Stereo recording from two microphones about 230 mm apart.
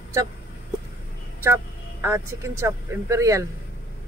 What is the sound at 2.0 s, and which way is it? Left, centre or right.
Speech, centre.